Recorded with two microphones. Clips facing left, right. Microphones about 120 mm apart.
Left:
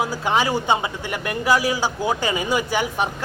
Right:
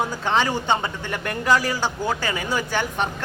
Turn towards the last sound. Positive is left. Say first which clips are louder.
# left 2 dB
turn(degrees=10)  # may be behind; listen again after turning